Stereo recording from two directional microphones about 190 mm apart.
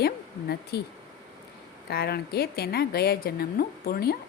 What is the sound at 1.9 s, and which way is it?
A woman's voice, 55° left (ahead or behind).